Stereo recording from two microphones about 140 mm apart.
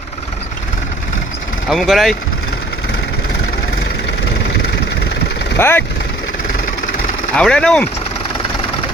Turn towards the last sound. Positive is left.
turn(degrees=5)  # may be behind; listen again after turning